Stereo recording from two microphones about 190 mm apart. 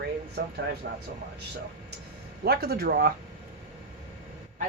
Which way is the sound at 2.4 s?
55° right (ahead or behind).